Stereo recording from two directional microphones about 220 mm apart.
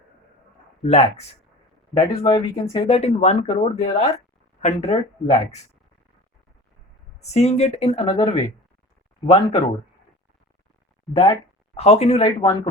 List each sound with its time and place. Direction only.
0.9 s speech: 30° left (ahead or behind)
7.2 s speech: 30° left (ahead or behind)
11.1 s speech: 15° left (ahead or behind)
11.8 s speech: 30° left (ahead or behind)